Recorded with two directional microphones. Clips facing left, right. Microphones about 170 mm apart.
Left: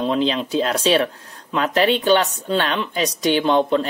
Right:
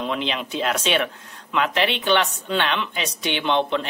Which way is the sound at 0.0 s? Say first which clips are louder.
Left 6 dB; 35° left (ahead or behind).